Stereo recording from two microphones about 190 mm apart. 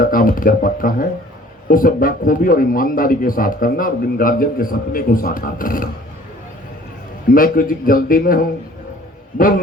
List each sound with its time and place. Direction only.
0.0 s a man's voice: 45° left (ahead or behind)
7.3 s a man's voice: 50° left (ahead or behind)